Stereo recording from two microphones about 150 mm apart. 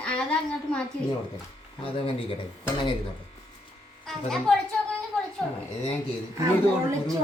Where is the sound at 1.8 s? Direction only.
40° left (ahead or behind).